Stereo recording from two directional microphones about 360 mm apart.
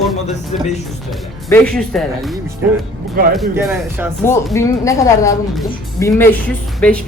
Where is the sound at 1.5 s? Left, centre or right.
Centre.